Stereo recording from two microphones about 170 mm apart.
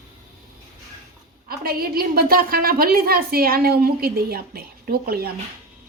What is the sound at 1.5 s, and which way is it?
A woman's voice, 60° right (ahead or behind).